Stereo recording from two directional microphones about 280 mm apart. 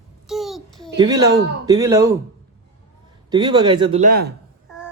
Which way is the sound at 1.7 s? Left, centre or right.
Centre.